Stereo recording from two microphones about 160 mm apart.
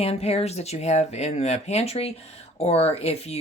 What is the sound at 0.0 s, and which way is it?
Speech, 40° left (ahead or behind).